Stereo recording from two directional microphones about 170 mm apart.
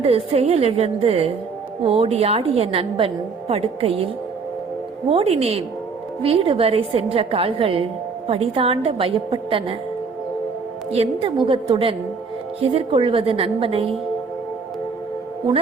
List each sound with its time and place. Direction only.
0.0 s a woman's voice: 35° right (ahead or behind)
5.0 s a woman's voice: 35° right (ahead or behind)
10.9 s a woman's voice: 35° right (ahead or behind)